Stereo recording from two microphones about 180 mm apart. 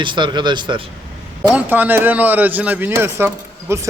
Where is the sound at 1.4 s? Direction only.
10° right (ahead or behind).